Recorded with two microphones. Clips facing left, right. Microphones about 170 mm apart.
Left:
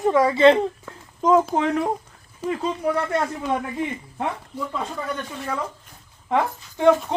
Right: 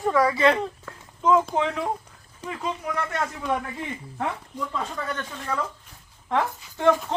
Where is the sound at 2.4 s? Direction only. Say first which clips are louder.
Left 7 dB; 30° left (ahead or behind).